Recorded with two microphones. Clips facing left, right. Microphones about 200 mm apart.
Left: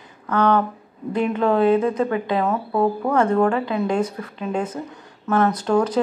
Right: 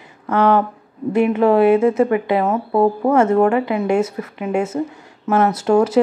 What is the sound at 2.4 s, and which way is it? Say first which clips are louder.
Speech: right 2 dB; 25° right (ahead or behind).